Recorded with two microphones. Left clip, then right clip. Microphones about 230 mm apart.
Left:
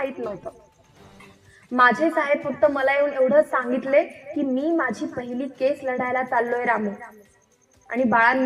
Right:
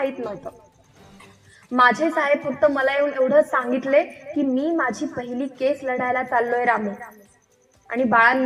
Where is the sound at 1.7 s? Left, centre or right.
Right.